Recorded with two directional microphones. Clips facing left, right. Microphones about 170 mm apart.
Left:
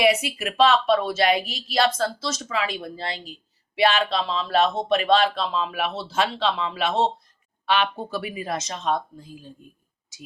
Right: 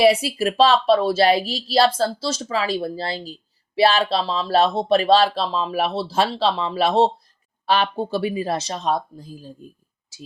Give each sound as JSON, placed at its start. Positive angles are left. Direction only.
{"t": 0.0, "sound": "speech", "side_deg": -35}